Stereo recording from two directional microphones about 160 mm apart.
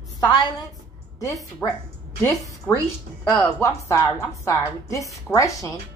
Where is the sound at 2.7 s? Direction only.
10° left (ahead or behind).